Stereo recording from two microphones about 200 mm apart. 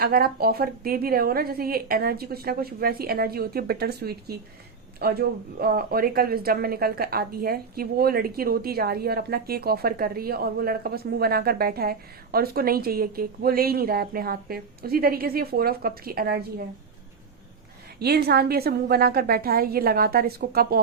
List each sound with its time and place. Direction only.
0.0 s speech: 50° right (ahead or behind)
18.0 s speech: 55° right (ahead or behind)